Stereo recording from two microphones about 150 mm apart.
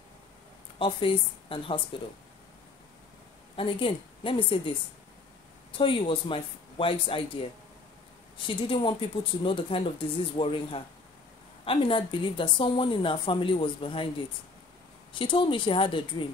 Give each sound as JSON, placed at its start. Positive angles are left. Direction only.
{"t": 0.7, "sound": "speech", "side_deg": 35}
{"t": 3.5, "sound": "speech", "side_deg": 35}
{"t": 5.8, "sound": "speech", "side_deg": 35}
{"t": 15.1, "sound": "speech", "side_deg": 35}